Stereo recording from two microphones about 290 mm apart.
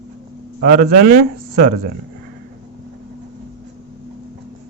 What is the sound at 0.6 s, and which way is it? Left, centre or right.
Speech, right.